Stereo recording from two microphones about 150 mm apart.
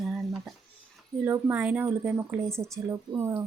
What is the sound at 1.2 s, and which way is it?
A woman's voice, 15° right (ahead or behind).